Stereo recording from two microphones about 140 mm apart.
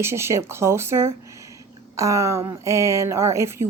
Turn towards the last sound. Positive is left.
turn(degrees=-20)  # may be behind; listen again after turning